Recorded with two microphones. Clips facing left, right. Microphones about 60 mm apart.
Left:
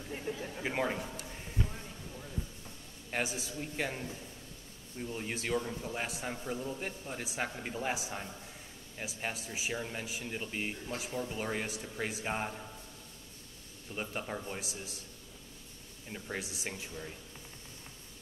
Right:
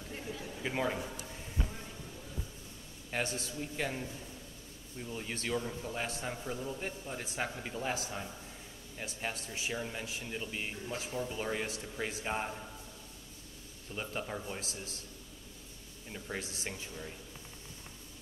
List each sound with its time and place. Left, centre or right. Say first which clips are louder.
0.3 s a man's voice: left 5 dB; left
0.7 s a man's voice: even; centre
3.1 s a man's voice: even; centre
5.1 s a man's voice: left 2 dB; centre
7.6 s a man's voice: left 1 dB; centre
13.9 s a man's voice: even; centre
16.1 s a man's voice: left 1 dB; centre